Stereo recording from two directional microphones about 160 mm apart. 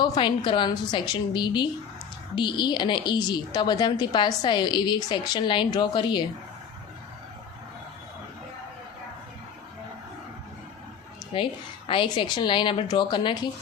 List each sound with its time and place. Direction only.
0.0 s a woman's voice: 30° left (ahead or behind)
11.9 s speech: 30° left (ahead or behind)